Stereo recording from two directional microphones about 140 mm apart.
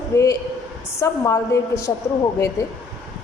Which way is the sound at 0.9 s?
20° left (ahead or behind).